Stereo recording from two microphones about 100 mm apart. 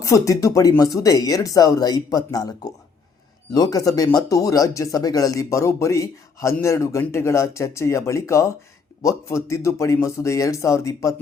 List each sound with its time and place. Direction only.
0.0 s speech: 35° left (ahead or behind)